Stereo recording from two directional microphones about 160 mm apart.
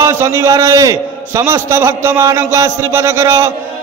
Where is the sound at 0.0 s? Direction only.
15° right (ahead or behind).